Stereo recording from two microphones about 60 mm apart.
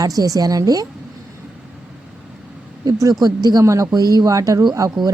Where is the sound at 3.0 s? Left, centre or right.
Right.